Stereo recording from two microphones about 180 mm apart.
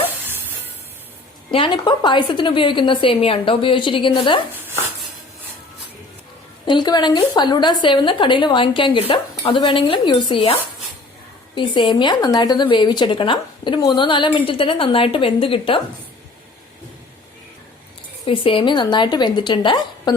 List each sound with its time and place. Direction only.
1.5 s speech: 30° left (ahead or behind)
6.7 s speech: 25° left (ahead or behind)
18.3 s speech: 30° left (ahead or behind)